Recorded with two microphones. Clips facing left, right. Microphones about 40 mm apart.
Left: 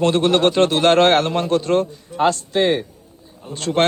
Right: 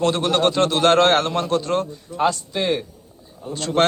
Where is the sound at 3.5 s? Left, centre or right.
Left.